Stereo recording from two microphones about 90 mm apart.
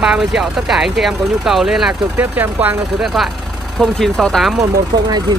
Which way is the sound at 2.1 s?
20° right (ahead or behind).